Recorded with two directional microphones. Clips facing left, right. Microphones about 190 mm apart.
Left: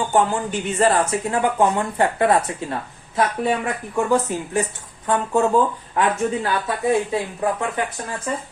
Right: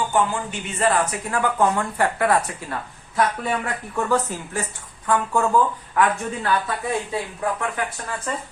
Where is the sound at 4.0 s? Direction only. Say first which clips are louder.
Left 3 dB; 15° left (ahead or behind).